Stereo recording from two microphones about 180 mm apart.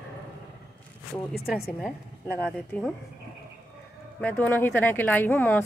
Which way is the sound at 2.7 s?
10° left (ahead or behind).